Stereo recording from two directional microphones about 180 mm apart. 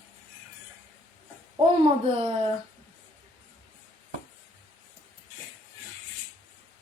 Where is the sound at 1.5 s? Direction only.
30° right (ahead or behind).